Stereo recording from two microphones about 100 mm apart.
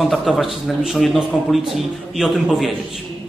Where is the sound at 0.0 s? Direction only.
Centre (ahead or behind).